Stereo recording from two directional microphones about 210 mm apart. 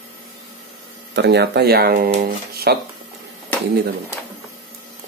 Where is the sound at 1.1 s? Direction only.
55° right (ahead or behind).